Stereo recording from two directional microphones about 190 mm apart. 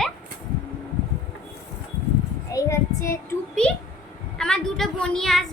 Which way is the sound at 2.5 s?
15° left (ahead or behind).